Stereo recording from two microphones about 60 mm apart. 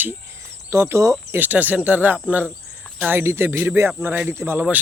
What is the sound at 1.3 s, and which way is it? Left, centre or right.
Speech, right.